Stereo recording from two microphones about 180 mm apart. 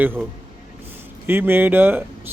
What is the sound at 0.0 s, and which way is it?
Speech, 10° right (ahead or behind).